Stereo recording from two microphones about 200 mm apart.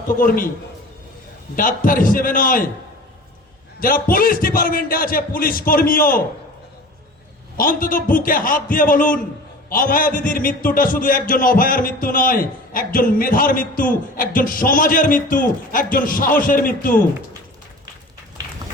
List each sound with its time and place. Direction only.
0.1 s a man's voice: 45° left (ahead or behind)
1.5 s a man's voice: 45° left (ahead or behind)
3.8 s a man's voice: 45° left (ahead or behind)
7.5 s a man's voice: 45° left (ahead or behind)